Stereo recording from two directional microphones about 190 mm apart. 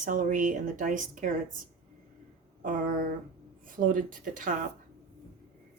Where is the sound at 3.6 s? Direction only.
45° right (ahead or behind).